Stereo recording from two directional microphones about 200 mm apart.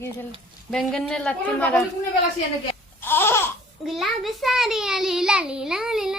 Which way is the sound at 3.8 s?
Centre (ahead or behind).